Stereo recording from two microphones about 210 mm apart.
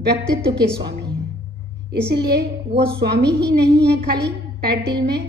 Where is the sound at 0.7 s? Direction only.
55° right (ahead or behind).